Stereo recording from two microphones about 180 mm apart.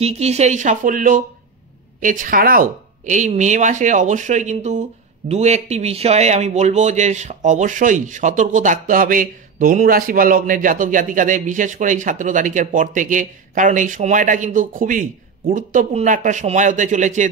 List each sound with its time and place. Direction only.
0.0 s speech: 35° right (ahead or behind)